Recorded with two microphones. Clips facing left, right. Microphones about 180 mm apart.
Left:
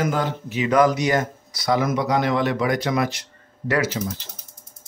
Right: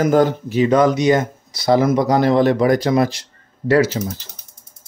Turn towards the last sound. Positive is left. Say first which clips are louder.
# right 7 dB
turn(degrees=-30)  # may be behind; listen again after turning